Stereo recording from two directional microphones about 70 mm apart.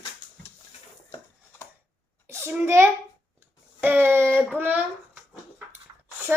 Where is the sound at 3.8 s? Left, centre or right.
Right.